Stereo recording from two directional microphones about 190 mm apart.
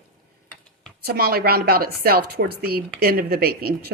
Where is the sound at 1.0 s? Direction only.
55° right (ahead or behind).